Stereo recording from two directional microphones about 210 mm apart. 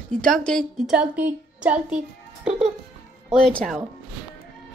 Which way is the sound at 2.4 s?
25° right (ahead or behind).